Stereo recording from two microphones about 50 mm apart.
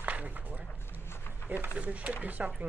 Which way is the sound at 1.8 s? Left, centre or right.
Right.